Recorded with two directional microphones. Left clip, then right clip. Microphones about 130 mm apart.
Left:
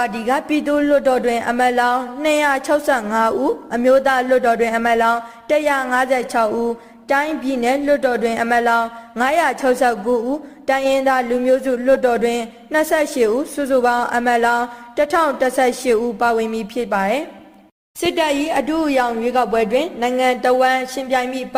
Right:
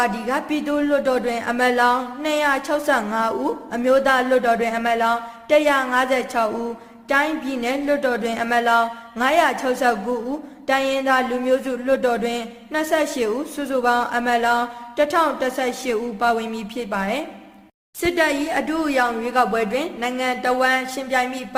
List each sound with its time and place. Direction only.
0.0 s speech: 35° left (ahead or behind)
18.0 s speech: 20° left (ahead or behind); by 21.4 s 35° left (ahead or behind)